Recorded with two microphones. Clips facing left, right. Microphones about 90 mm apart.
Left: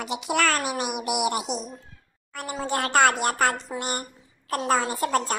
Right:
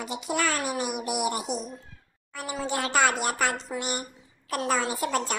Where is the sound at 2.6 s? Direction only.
50° left (ahead or behind).